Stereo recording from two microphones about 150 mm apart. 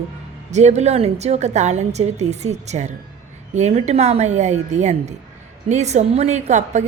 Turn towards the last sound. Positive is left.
turn(degrees=-50)  # may be behind; listen again after turning